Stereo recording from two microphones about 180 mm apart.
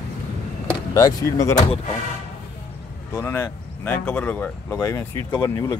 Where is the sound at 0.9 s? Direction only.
20° left (ahead or behind).